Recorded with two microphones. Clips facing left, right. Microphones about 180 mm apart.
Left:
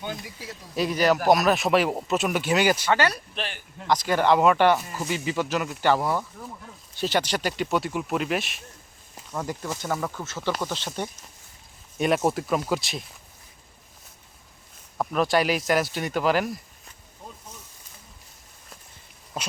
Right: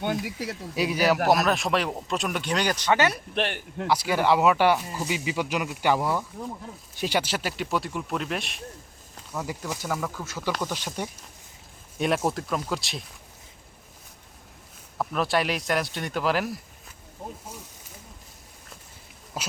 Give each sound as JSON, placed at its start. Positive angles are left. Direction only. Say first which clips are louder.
{"t": 0.0, "sound": "speech", "louder": "right 7 dB", "side_deg": -70}
{"t": 0.8, "sound": "speech", "louder": "left 1 dB", "side_deg": -10}
{"t": 2.9, "sound": "speech", "louder": "even", "side_deg": -20}
{"t": 3.3, "sound": "speech", "louder": "right 7 dB", "side_deg": -60}
{"t": 3.8, "sound": "speech", "louder": "left 2 dB", "side_deg": -10}
{"t": 6.0, "sound": "speech", "louder": "left 1 dB", "side_deg": 15}
{"t": 7.0, "sound": "speech", "louder": "left 2 dB", "side_deg": -10}
{"t": 10.8, "sound": "speech", "louder": "left 1 dB", "side_deg": -10}
{"t": 11.9, "sound": "speech", "louder": "left 2 dB", "side_deg": 0}
{"t": 15.1, "sound": "speech", "louder": "left 3 dB", "side_deg": 0}
{"t": 19.3, "sound": "speech", "louder": "left 2 dB", "side_deg": -5}